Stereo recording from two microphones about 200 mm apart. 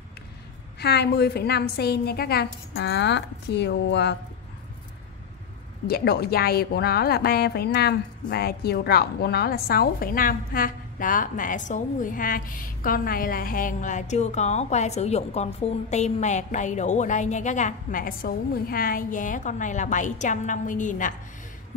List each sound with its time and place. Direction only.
0.7 s a woman's voice: 55° left (ahead or behind)
5.9 s speech: 50° left (ahead or behind)